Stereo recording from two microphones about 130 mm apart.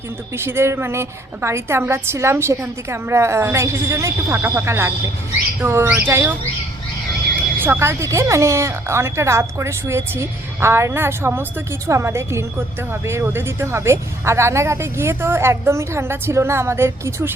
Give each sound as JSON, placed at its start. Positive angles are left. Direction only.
{"t": 0.3, "sound": "speech", "side_deg": -20}
{"t": 7.6, "sound": "speech", "side_deg": -20}